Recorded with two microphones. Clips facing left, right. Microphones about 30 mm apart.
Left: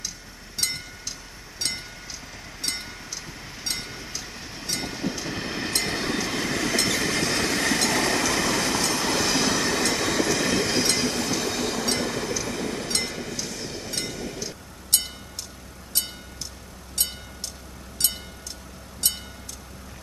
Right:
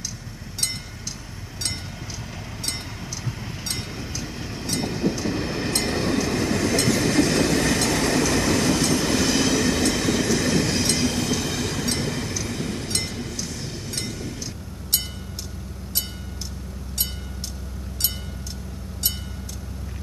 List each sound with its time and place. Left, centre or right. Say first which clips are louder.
3.6 s vehicle: even; centre
4.2 s train: right 5 dB; centre
11.3 s train: even; left
11.9 s train: even; centre
14.0 s a sound: even; centre